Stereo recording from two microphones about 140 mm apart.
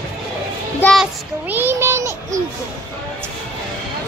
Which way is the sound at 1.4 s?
15° right (ahead or behind).